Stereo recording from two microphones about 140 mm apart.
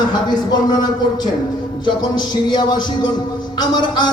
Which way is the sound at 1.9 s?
30° left (ahead or behind).